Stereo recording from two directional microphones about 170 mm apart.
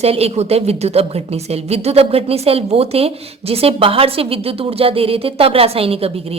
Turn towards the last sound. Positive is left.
turn(degrees=-35)  # may be behind; listen again after turning